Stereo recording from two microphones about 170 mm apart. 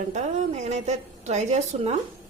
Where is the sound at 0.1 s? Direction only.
40° right (ahead or behind).